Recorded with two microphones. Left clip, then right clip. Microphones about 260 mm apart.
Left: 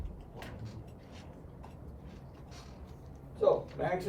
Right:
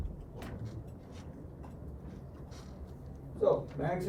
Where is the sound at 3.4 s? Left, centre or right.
Left.